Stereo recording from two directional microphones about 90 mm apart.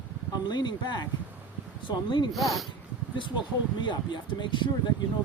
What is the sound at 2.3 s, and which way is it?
Speech, centre (ahead or behind).